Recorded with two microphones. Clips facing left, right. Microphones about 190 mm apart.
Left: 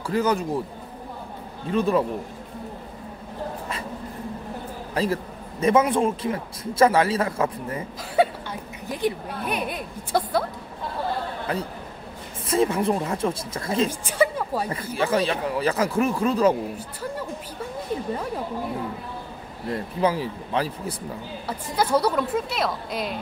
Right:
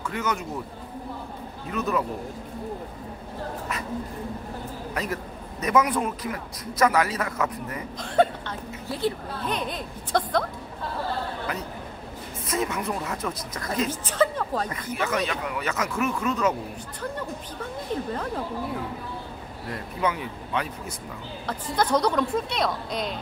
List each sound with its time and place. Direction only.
0.0 s speech: 35° left (ahead or behind)
1.7 s a man's voice: 30° left (ahead or behind)
4.9 s a man's voice: 30° left (ahead or behind)
8.0 s speech: 10° left (ahead or behind)
12.4 s a man's voice: 30° left (ahead or behind)
13.8 s a woman's voice: 10° left (ahead or behind)
14.7 s speech: 30° left (ahead or behind)
18.1 s speech: 10° left (ahead or behind)
19.7 s speech: 30° left (ahead or behind)
21.5 s a woman's voice: 10° left (ahead or behind)